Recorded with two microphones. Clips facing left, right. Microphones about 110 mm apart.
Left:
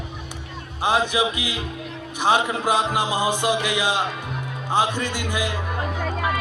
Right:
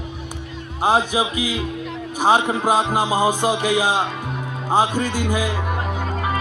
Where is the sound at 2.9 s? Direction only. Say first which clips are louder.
Right 4 dB; 40° right (ahead or behind).